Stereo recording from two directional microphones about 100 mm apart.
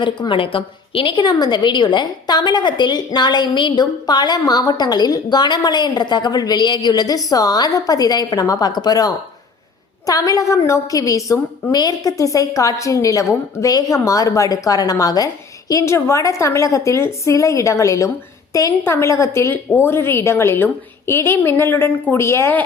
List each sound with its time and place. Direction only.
0.0 s a woman's voice: 55° left (ahead or behind); by 22.5 s 30° left (ahead or behind)